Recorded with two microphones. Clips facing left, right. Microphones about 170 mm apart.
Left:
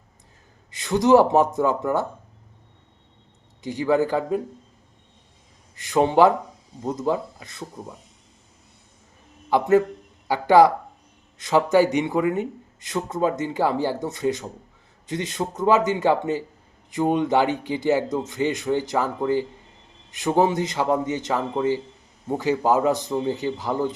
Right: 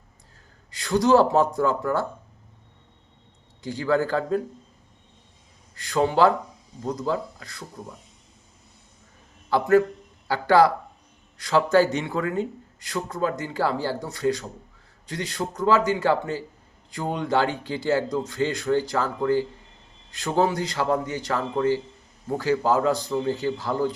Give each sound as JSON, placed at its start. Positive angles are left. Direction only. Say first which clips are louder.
{"t": 0.7, "sound": "speech", "louder": "left 2 dB", "side_deg": 20}
{"t": 3.6, "sound": "a man's voice", "louder": "left 2 dB", "side_deg": 20}
{"t": 5.7, "sound": "speech", "louder": "left 3 dB", "side_deg": 20}
{"t": 9.5, "sound": "a man's voice", "louder": "left 1 dB", "side_deg": 20}